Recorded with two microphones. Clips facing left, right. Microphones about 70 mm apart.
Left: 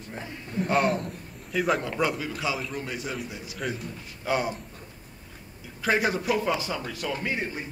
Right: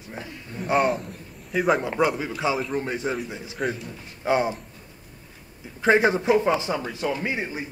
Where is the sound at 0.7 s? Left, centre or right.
Centre.